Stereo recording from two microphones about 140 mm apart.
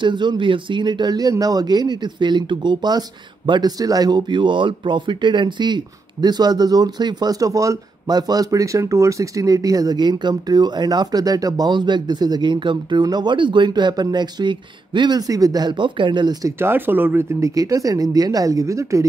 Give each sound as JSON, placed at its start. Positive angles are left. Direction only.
{"t": 0.0, "sound": "speech", "side_deg": -35}
{"t": 16.5, "sound": "speech", "side_deg": -15}